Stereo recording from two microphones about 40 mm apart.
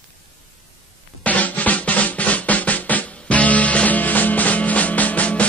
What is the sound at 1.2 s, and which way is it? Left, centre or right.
Music, left.